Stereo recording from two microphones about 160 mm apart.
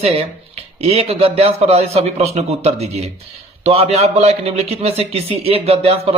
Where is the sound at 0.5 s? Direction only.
40° right (ahead or behind).